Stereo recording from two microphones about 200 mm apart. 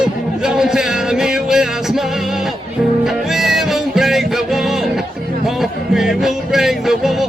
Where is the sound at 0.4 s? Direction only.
5° right (ahead or behind).